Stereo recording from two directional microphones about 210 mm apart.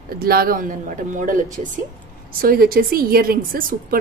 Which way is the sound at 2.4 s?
45° right (ahead or behind).